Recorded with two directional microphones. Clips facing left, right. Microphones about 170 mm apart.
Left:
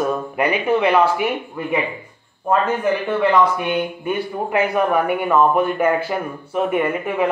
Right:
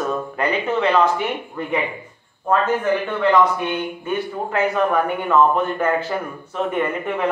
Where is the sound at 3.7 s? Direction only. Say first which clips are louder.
Left 2 dB; 10° left (ahead or behind).